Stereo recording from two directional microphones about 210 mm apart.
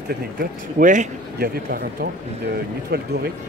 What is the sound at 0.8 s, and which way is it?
A man's voice, 40° right (ahead or behind).